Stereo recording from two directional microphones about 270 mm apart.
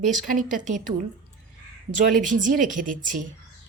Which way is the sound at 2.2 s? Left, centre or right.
Right.